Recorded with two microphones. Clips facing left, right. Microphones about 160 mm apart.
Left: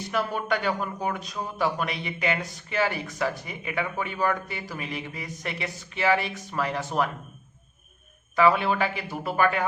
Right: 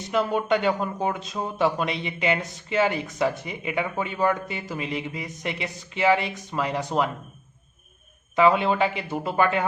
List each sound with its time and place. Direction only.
0.1 s speech: 20° right (ahead or behind)
8.4 s speech: 20° right (ahead or behind)